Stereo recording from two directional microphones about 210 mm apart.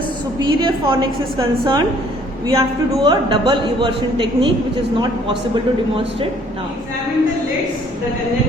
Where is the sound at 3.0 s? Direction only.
25° right (ahead or behind).